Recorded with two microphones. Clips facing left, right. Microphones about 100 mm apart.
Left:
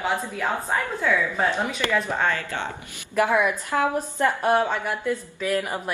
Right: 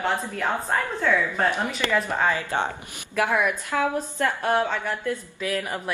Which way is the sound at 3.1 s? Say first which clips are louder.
Left 2 dB; 15° left (ahead or behind).